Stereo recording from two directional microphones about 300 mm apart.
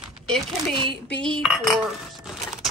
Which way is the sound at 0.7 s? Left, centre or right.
Centre.